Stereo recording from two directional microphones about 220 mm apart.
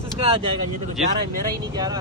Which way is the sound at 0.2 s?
25° right (ahead or behind).